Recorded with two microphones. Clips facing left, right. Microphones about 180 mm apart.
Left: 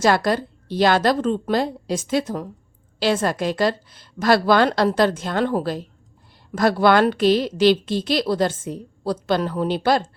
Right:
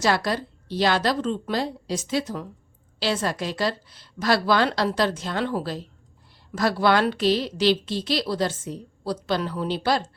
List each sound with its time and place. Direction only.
0.0 s a woman's voice: 50° left (ahead or behind)